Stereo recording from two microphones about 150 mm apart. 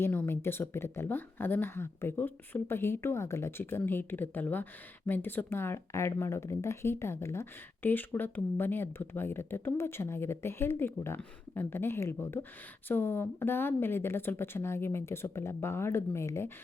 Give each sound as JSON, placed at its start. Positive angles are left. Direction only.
{"t": 0.0, "sound": "speech", "side_deg": 15}